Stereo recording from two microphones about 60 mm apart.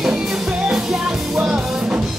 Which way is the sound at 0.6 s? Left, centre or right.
Centre.